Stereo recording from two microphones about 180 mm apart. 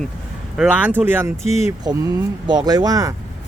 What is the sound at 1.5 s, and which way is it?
Speech, 35° left (ahead or behind).